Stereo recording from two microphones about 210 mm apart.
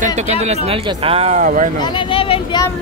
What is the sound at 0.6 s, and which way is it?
Speech, 25° right (ahead or behind).